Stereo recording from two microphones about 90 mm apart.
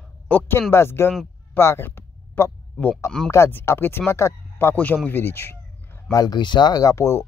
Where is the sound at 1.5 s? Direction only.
25° left (ahead or behind).